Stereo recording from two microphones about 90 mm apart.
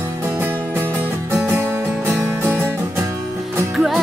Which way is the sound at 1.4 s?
25° right (ahead or behind).